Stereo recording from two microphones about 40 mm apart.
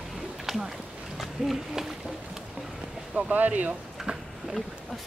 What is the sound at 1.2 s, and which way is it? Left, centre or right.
Speech, centre.